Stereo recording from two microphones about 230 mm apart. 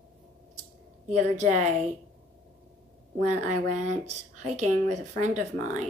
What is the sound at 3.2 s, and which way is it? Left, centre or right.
Speech, right.